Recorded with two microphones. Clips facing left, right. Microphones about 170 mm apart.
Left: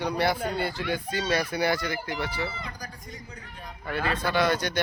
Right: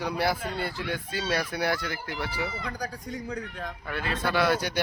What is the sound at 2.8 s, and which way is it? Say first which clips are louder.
Speech: right 7 dB; 70° right (ahead or behind).